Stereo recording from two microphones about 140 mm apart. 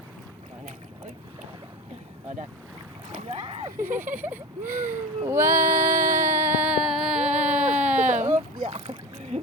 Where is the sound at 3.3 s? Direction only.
45° right (ahead or behind).